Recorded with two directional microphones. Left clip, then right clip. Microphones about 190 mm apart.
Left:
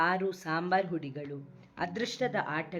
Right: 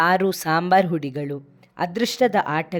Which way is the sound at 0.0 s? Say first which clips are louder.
Right 11 dB; 60° right (ahead or behind).